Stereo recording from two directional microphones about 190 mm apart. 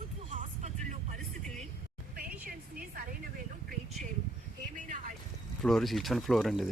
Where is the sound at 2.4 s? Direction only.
50° right (ahead or behind).